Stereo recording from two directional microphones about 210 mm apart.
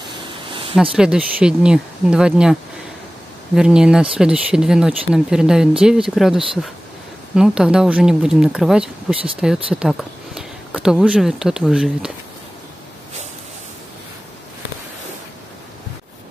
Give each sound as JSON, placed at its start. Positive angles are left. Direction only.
{"t": 0.3, "sound": "a sound", "side_deg": -25}
{"t": 0.7, "sound": "speech", "side_deg": -5}
{"t": 3.5, "sound": "speech", "side_deg": -5}